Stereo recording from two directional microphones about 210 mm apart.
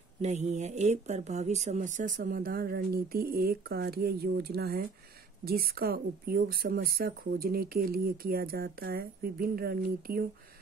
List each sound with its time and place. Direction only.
0.2 s speech: 35° right (ahead or behind)